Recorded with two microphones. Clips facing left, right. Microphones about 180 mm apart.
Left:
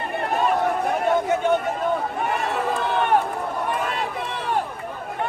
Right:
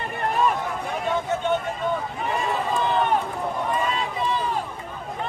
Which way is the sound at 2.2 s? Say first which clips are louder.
Left 1 dB; 65° left (ahead or behind).